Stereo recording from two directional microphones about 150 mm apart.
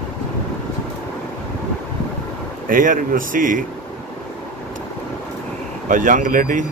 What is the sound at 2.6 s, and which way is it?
Speech, 65° right (ahead or behind).